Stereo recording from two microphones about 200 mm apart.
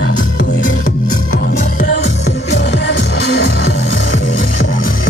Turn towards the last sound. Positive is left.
turn(degrees=65)  # may be behind; listen again after turning